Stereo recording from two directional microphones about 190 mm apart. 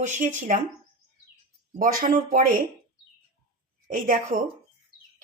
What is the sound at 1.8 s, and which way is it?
Speech, 45° right (ahead or behind).